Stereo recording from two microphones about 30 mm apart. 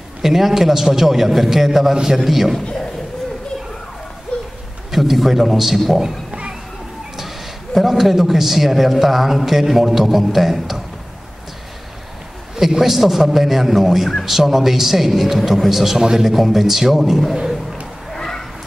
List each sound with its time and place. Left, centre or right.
0.2 s a man's voice: centre
4.3 s a sound: left
4.9 s a man's voice: centre
7.7 s a man's voice: centre
12.5 s a man's voice: centre
18.1 s a sound: centre